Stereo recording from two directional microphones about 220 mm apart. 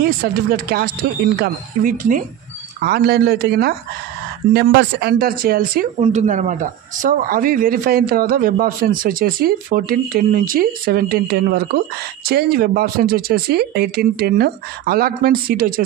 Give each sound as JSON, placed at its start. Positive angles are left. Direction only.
{"t": 0.0, "sound": "speech", "side_deg": -45}